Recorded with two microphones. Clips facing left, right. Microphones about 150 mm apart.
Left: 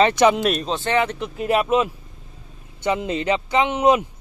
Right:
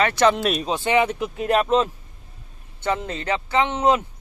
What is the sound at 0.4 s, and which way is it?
Speech, centre (ahead or behind).